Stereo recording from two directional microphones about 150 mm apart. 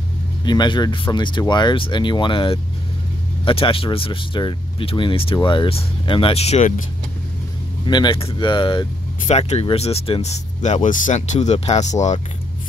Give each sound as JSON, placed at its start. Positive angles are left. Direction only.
{"t": 0.5, "sound": "speech", "side_deg": 30}
{"t": 7.8, "sound": "speech", "side_deg": 30}
{"t": 9.3, "sound": "speech", "side_deg": 45}